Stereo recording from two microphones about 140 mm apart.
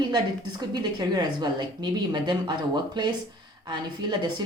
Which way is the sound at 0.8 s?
30° right (ahead or behind).